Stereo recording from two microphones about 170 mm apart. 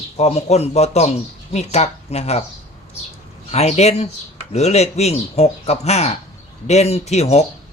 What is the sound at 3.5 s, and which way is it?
Speech, 40° left (ahead or behind).